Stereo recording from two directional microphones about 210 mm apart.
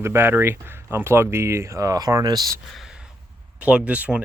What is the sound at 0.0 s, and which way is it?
Speech, 10° right (ahead or behind).